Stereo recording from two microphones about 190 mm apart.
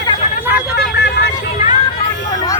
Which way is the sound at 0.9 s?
65° left (ahead or behind).